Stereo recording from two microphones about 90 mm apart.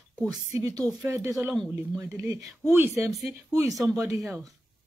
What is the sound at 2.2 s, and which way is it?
Speech, 35° right (ahead or behind).